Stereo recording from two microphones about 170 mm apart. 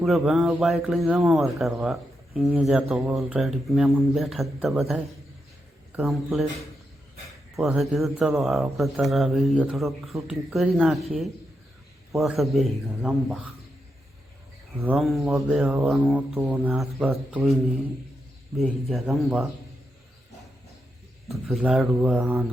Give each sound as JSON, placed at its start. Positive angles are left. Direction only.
{"t": 0.0, "sound": "speech", "side_deg": 0}
{"t": 6.1, "sound": "speech", "side_deg": 0}
{"t": 14.9, "sound": "speech", "side_deg": 0}
{"t": 18.5, "sound": "speech", "side_deg": 0}
{"t": 21.2, "sound": "speech", "side_deg": 0}